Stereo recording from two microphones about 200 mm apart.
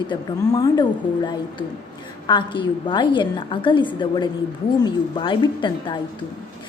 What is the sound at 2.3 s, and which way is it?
A woman's voice, 25° left (ahead or behind).